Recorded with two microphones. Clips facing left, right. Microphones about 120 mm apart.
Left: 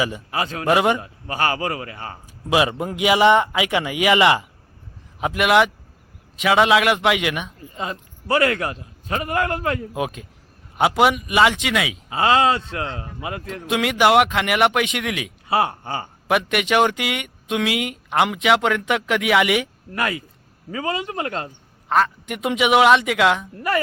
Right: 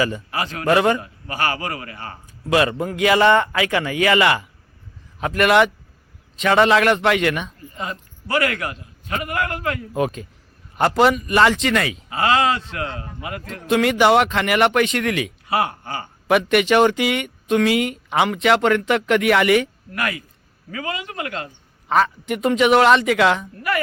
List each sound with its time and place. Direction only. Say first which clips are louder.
0.0 s a man's voice: right 1 dB; 15° left (ahead or behind)
5.2 s a man's voice: right 1 dB; 10° left (ahead or behind)
7.8 s a man's voice: left 1 dB; 25° left (ahead or behind)
9.9 s speech: right 4 dB; 5° left (ahead or behind)
12.0 s a man's voice: left 2 dB; 25° left (ahead or behind)
13.4 s speech: right 5 dB; 5° left (ahead or behind)
15.4 s a man's voice: left 3 dB; 25° left (ahead or behind)
16.2 s speech: right 4 dB; centre (ahead or behind)
19.9 s a man's voice: left 1 dB; 25° left (ahead or behind)
21.8 s speech: right 1 dB; centre (ahead or behind)